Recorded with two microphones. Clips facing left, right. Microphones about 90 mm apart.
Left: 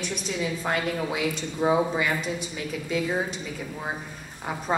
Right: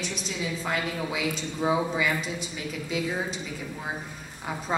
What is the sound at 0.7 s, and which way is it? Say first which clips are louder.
Speech: left 3 dB; 45° left (ahead or behind).